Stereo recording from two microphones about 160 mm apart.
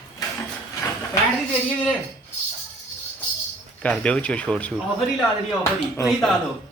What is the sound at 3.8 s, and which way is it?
Speech, 5° left (ahead or behind).